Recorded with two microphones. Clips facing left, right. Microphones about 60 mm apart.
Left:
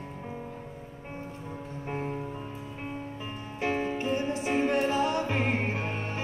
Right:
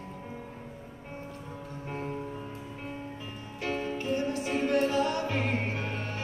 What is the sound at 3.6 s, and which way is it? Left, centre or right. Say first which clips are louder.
Music: left 3 dB; left.